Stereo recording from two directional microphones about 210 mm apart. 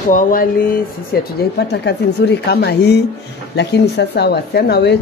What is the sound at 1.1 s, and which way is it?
Speech, 45° left (ahead or behind).